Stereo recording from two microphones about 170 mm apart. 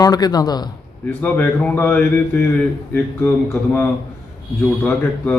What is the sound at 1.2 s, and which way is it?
A man's voice, 10° left (ahead or behind).